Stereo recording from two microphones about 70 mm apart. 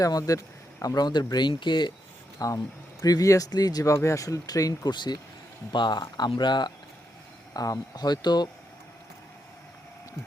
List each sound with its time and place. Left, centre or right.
0.0 s speech: left
0.9 s speech: left
2.4 s speech: left
4.9 s speech: left
7.5 s speech: left